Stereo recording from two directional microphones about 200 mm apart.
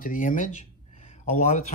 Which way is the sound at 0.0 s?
40° left (ahead or behind).